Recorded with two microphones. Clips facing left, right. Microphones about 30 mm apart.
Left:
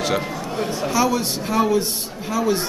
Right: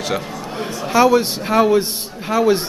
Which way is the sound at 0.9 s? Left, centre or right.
Right.